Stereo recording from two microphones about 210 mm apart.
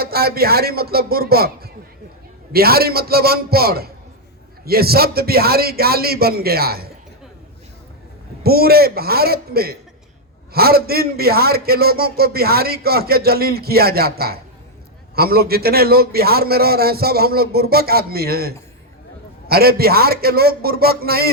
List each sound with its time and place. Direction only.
0.0 s a man's voice: 45° right (ahead or behind)
8.4 s a man's voice: 45° right (ahead or behind)